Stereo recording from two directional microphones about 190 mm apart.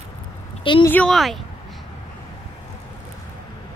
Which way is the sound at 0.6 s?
25° left (ahead or behind).